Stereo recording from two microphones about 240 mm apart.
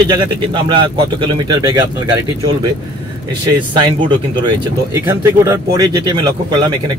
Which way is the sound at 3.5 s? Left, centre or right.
Centre.